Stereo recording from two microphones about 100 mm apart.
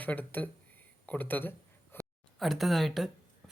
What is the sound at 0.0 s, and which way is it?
Speech, 15° left (ahead or behind).